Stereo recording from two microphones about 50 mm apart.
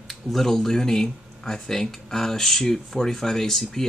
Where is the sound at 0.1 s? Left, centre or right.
Centre.